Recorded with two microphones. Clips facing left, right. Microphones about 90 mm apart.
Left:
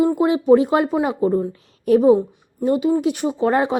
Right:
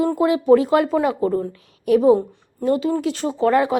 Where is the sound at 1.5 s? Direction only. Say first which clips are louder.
Left 1 dB; 30° left (ahead or behind).